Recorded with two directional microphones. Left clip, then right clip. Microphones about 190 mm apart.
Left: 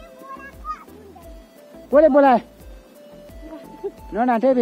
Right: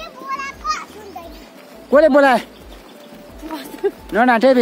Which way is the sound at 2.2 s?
5° left (ahead or behind).